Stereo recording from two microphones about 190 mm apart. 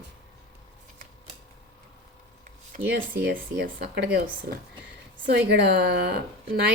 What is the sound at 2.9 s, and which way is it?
A woman's voice, 60° right (ahead or behind).